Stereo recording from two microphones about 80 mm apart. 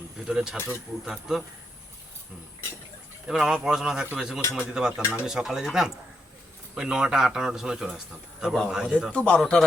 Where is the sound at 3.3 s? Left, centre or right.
Centre.